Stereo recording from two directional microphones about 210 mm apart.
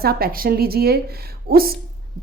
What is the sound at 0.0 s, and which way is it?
Speech, 45° right (ahead or behind).